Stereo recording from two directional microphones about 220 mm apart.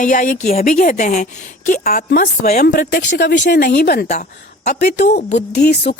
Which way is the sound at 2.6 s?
45° left (ahead or behind).